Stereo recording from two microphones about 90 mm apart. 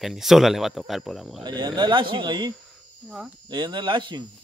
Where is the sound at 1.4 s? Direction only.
55° right (ahead or behind).